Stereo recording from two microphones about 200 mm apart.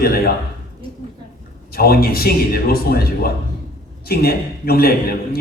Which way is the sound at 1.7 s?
50° left (ahead or behind).